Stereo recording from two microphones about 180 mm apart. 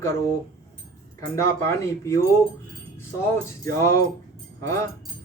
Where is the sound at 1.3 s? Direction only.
15° left (ahead or behind).